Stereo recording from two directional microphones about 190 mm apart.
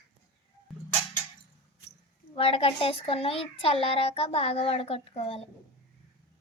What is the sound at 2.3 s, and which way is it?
A child's voice, 30° left (ahead or behind).